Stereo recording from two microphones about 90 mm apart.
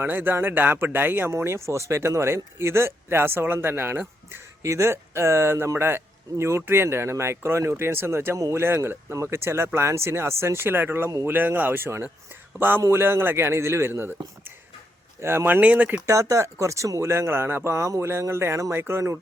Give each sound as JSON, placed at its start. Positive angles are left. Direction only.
{"t": 0.0, "sound": "speech", "side_deg": -20}
{"t": 15.2, "sound": "speech", "side_deg": -30}
{"t": 15.6, "sound": "speech", "side_deg": -15}
{"t": 16.0, "sound": "speech", "side_deg": -35}